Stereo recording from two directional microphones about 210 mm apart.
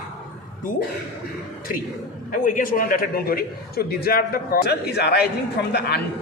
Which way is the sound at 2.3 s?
40° left (ahead or behind).